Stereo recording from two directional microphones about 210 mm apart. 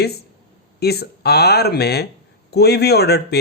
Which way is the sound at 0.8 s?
50° left (ahead or behind).